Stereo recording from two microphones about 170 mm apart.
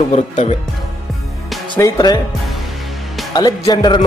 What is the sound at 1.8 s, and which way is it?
Speech, 25° left (ahead or behind).